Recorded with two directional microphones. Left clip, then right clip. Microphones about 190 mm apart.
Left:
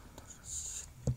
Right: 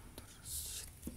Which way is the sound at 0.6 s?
35° right (ahead or behind).